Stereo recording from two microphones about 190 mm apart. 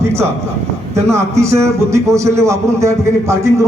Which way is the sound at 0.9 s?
15° right (ahead or behind).